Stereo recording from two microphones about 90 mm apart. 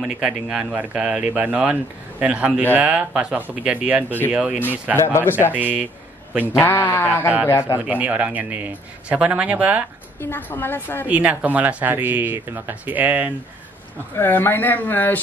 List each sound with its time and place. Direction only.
0.0 s speech: 5° right (ahead or behind)
4.9 s speech: 25° left (ahead or behind)
5.5 s speech: 15° right (ahead or behind)
6.6 s speech: 25° left (ahead or behind)
7.8 s speech: 15° right (ahead or behind)
10.2 s speech: 25° left (ahead or behind)
11.1 s speech: 15° right (ahead or behind)
14.1 s speech: 25° left (ahead or behind)